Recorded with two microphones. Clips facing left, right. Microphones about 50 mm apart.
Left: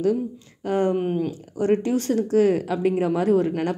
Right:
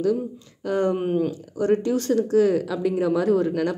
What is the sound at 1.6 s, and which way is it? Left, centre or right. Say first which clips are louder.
Speech: even; left.